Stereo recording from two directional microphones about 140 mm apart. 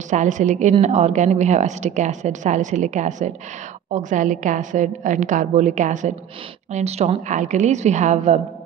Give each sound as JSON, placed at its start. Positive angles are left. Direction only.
{"t": 0.1, "sound": "a woman's voice", "side_deg": -60}